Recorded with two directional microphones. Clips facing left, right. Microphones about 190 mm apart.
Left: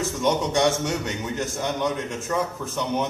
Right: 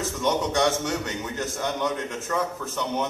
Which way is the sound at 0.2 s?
15° left (ahead or behind).